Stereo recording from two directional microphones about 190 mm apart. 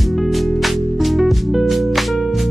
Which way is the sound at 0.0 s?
Centre (ahead or behind).